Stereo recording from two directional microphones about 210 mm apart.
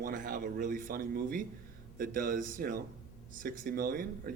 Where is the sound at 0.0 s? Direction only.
40° right (ahead or behind).